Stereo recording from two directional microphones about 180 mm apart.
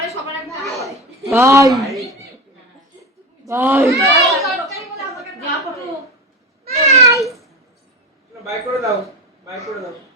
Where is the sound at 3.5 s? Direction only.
15° right (ahead or behind).